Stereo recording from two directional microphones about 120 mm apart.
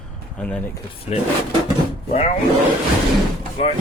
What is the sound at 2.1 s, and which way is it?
Speech, 70° left (ahead or behind).